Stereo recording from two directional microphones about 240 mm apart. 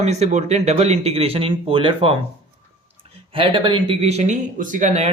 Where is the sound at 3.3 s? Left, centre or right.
Right.